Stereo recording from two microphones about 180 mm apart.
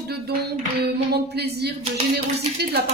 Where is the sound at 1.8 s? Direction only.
35° right (ahead or behind).